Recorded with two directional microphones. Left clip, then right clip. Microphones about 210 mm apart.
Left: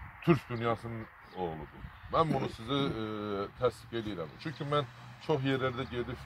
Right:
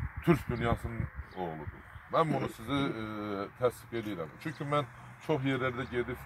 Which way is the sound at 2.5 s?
5° left (ahead or behind).